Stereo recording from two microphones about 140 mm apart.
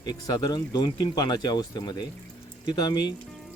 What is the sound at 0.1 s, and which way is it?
Speech, 25° left (ahead or behind).